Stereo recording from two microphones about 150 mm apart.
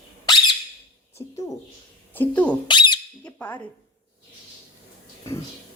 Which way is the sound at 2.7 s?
30° left (ahead or behind).